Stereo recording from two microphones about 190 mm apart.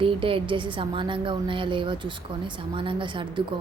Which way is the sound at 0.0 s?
30° right (ahead or behind).